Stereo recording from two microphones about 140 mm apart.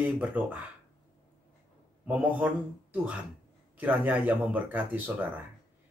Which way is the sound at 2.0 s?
10° right (ahead or behind).